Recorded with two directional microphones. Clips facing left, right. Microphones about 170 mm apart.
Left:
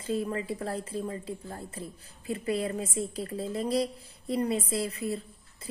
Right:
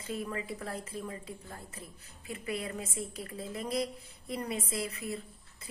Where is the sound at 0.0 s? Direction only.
30° left (ahead or behind).